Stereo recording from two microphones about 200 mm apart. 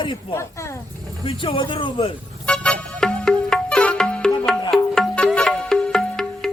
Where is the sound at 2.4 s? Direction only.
5° left (ahead or behind).